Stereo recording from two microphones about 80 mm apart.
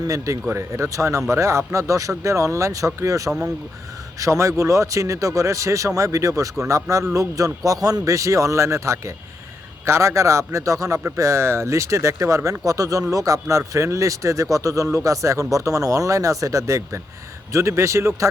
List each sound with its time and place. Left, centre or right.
0.0 s a man's voice: right